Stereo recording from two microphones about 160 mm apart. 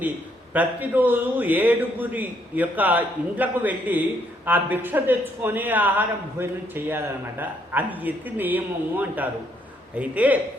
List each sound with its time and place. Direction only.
0.5 s a man's voice: 10° right (ahead or behind)